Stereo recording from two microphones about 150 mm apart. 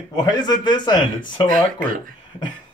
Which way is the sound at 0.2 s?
30° left (ahead or behind).